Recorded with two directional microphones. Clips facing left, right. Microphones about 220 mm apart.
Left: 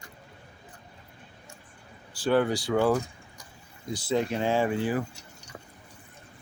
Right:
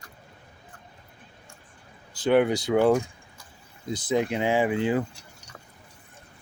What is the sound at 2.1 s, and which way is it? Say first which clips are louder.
Speech: right 3 dB; 20° right (ahead or behind).